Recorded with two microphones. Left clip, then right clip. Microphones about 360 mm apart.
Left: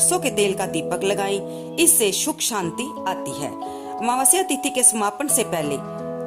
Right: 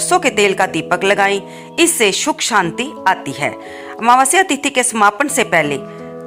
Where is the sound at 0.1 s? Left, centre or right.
Left.